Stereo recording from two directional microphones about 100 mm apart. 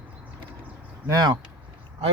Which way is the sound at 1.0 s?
40° right (ahead or behind).